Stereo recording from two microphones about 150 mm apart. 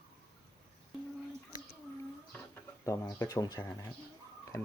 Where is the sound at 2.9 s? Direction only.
20° left (ahead or behind).